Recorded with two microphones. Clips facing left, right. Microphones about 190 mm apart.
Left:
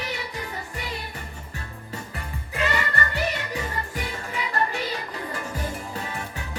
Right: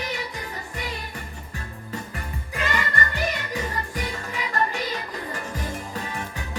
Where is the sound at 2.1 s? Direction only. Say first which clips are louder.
Left 1 dB; 40° right (ahead or behind).